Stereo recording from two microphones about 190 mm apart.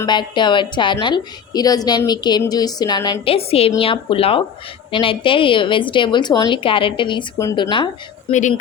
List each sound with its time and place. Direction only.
0.0 s a woman's voice: 25° left (ahead or behind)
8.3 s speech: 40° left (ahead or behind)